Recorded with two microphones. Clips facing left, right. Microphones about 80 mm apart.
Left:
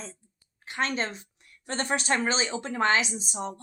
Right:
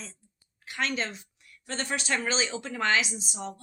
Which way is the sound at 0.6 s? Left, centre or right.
Left.